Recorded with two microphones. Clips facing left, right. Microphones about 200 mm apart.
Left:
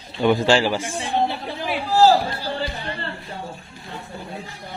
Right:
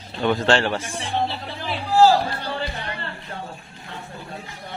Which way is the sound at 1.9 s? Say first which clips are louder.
Even; 35° left (ahead or behind).